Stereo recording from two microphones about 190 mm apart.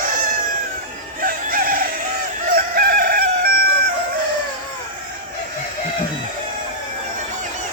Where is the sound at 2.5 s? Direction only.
50° right (ahead or behind).